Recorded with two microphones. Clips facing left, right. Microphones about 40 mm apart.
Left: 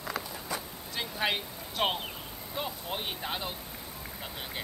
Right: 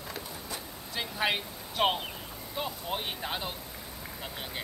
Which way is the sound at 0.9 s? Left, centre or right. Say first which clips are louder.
Right 1 dB; centre.